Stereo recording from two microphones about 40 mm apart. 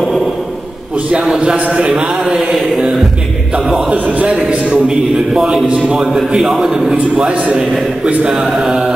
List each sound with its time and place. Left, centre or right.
1.7 s a man's voice: right
2.0 s a man's voice: centre
3.9 s a man's voice: right
4.3 s a man's voice: right
6.0 s a man's voice: centre
6.9 s a man's voice: right
8.3 s a man's voice: centre